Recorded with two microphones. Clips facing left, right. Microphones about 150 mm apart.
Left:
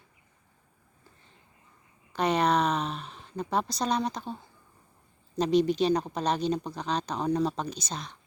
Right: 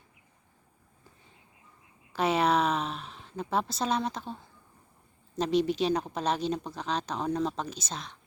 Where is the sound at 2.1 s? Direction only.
5° right (ahead or behind).